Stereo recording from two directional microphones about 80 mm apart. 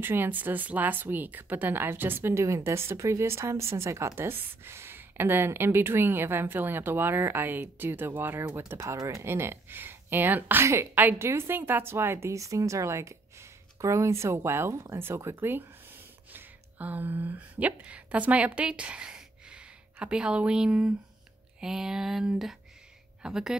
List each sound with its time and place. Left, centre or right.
0.0 s a woman's voice: right
9.2 s a woman's voice: right
16.3 s speech: right
21.5 s a sound: centre